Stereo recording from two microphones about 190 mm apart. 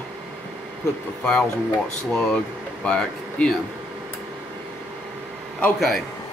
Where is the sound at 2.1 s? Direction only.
Centre (ahead or behind).